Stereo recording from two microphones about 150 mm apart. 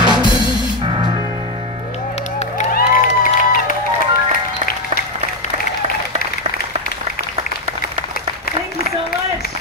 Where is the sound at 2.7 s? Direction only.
70° left (ahead or behind).